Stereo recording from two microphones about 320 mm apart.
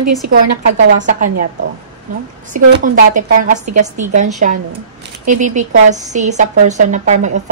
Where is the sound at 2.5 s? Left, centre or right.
Right.